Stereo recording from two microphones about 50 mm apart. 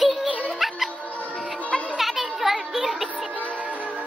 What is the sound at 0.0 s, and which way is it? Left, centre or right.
Music, centre.